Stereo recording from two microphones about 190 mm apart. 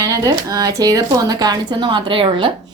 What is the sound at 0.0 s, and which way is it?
A woman's voice, 20° right (ahead or behind).